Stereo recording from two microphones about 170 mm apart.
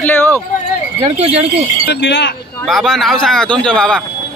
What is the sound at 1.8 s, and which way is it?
Speech, 90° left.